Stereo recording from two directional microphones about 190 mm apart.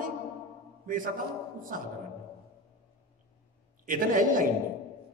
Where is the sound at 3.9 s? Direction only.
45° right (ahead or behind).